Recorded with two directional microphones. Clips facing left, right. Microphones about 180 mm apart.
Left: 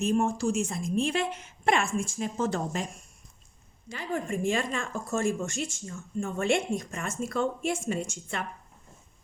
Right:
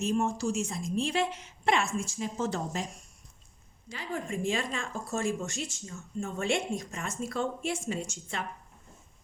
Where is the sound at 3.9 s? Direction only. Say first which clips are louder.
Left 3 dB; 50° left (ahead or behind).